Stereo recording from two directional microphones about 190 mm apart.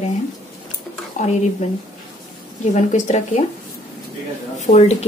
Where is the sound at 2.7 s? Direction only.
40° left (ahead or behind).